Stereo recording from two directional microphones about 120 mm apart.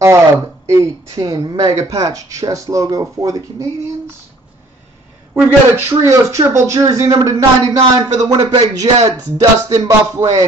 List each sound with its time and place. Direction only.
0.7 s speech: 30° right (ahead or behind)
5.3 s speech: 20° right (ahead or behind)